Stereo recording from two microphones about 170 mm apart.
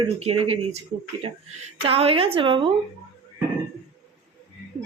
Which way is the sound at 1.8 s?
35° right (ahead or behind).